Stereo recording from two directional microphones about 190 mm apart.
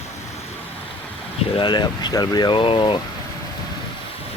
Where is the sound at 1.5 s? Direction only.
25° left (ahead or behind).